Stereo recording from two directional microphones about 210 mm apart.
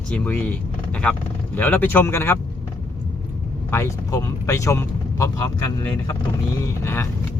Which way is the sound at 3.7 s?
15° left (ahead or behind).